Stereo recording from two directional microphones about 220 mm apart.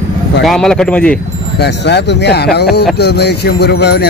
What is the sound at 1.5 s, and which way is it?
Speech, 50° left (ahead or behind).